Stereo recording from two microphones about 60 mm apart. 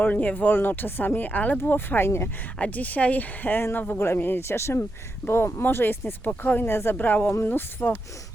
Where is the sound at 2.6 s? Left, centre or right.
Left.